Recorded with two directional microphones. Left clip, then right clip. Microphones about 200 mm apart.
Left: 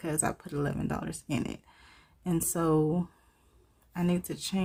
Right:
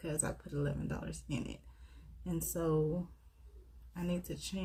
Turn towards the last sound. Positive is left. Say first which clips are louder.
# left 8 dB
turn(degrees=40)  # may be behind; listen again after turning